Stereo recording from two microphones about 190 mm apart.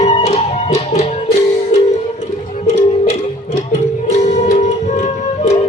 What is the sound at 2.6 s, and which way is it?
Music, 35° left (ahead or behind).